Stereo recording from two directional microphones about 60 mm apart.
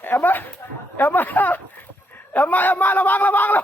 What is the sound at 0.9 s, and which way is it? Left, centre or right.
Speech, left.